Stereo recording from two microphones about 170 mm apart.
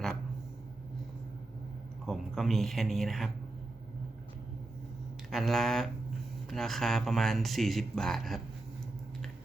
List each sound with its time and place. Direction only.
2.0 s speech: centre (ahead or behind)
5.3 s speech: centre (ahead or behind)